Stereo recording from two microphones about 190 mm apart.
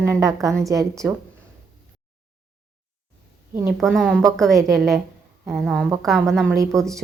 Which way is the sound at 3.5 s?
10° right (ahead or behind).